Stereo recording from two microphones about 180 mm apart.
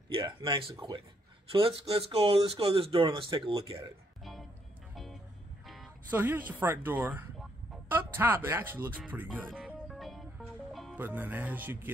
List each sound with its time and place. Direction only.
0.4 s speech: 30° right (ahead or behind)
4.2 s music: centre (ahead or behind)
6.0 s speech: 10° right (ahead or behind)
9.8 s music: centre (ahead or behind)
11.0 s speech: 10° right (ahead or behind)